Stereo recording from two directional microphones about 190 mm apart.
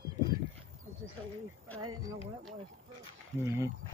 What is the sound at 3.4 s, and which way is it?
Speech, 15° right (ahead or behind).